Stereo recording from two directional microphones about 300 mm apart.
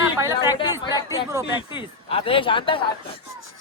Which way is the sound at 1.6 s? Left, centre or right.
Centre.